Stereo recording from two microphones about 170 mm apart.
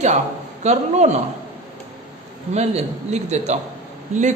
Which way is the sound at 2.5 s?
40° right (ahead or behind).